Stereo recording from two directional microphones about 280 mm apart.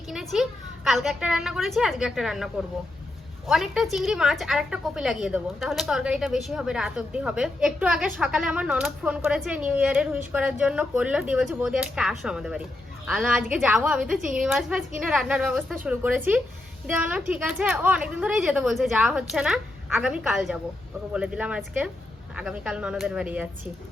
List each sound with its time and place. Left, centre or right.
0.9 s a woman's voice: centre